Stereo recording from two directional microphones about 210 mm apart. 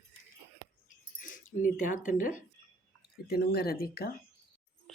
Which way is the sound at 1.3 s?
40° left (ahead or behind).